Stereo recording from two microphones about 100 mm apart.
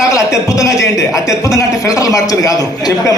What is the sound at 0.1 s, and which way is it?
A man's voice, 35° left (ahead or behind).